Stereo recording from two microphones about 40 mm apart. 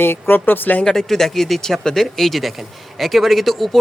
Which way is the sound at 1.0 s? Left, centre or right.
Centre.